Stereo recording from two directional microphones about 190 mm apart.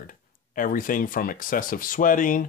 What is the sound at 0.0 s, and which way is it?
Speech, 45° left (ahead or behind).